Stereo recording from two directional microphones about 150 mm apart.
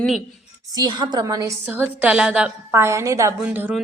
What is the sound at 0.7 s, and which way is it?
Speech, 25° right (ahead or behind).